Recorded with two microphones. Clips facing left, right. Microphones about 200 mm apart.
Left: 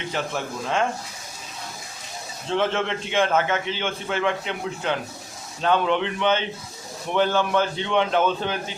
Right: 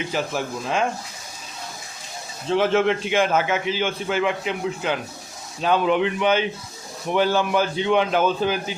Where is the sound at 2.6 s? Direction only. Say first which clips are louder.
Right 5 dB; 10° right (ahead or behind).